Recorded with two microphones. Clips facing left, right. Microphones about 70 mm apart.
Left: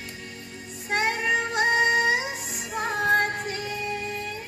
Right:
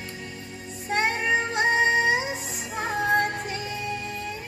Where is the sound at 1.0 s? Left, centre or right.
Right.